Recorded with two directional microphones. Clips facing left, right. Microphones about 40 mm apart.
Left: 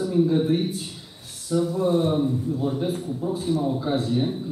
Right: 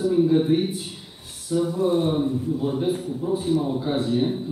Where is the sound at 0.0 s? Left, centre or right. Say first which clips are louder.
Right 2 dB; centre.